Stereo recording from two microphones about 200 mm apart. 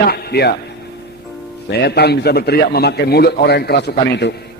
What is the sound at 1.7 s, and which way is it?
A man's voice, 55° left (ahead or behind).